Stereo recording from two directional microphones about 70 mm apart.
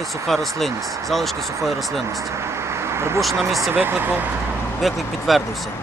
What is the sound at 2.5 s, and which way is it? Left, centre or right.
Vehicle, right.